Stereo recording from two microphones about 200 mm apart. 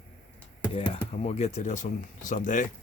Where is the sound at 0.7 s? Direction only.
30° left (ahead or behind).